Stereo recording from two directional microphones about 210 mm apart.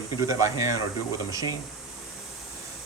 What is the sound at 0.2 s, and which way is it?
Speech, 15° right (ahead or behind).